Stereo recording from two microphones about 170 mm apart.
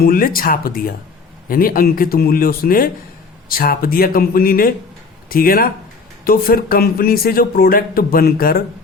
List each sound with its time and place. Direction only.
0.0 s speech: 60° left (ahead or behind)